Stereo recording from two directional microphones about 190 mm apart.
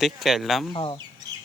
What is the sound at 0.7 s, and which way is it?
Speech, 25° left (ahead or behind).